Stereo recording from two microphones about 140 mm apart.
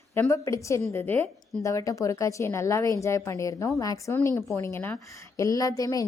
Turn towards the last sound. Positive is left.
turn(degrees=25)  # may be behind; listen again after turning